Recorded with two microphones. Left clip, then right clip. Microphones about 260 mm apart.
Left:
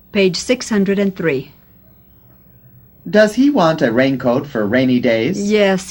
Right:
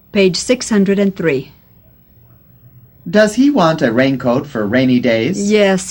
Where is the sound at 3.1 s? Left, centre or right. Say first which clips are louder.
Right 1 dB; left.